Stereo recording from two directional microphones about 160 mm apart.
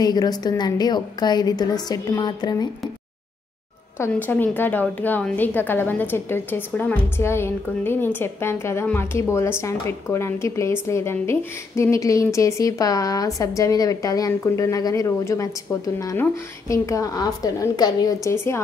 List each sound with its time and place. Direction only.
0.0 s speech: 25° left (ahead or behind)
4.0 s a woman's voice: 10° left (ahead or behind)